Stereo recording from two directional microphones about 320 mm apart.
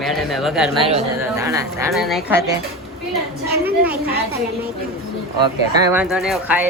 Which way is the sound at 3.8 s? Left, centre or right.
Right.